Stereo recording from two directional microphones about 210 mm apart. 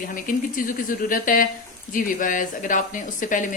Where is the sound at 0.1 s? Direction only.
40° left (ahead or behind).